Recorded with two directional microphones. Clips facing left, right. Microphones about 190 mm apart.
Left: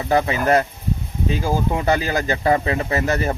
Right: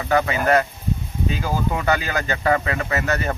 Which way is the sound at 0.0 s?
30° left (ahead or behind).